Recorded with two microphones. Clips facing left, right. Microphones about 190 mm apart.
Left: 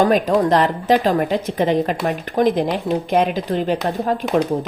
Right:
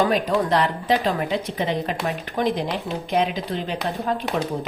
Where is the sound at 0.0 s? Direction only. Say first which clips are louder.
Left 5 dB; 45° left (ahead or behind).